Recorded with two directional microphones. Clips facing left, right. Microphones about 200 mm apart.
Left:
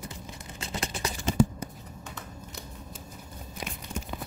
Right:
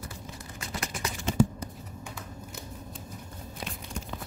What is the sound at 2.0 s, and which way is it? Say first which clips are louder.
Shuffling cards: even; 10° right (ahead or behind).